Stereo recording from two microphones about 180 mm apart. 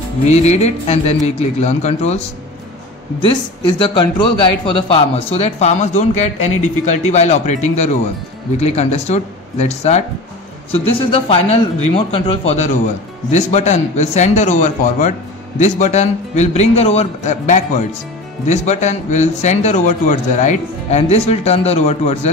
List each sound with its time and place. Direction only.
0.3 s a man's voice: 40° left (ahead or behind)
3.9 s a man's voice: 25° left (ahead or behind)